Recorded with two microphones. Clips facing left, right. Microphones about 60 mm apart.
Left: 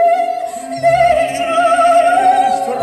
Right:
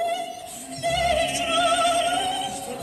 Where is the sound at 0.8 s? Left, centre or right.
Left.